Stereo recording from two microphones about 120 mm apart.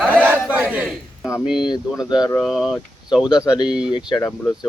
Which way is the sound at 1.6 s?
35° left (ahead or behind).